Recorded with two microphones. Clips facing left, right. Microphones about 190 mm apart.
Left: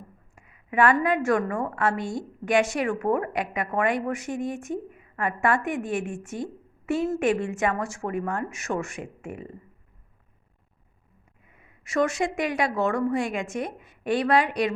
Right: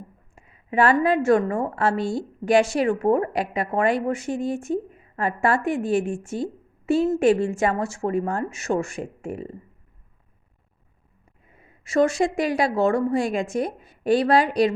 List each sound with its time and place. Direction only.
0.3 s a woman's voice: 30° right (ahead or behind)
11.4 s a woman's voice: 30° right (ahead or behind)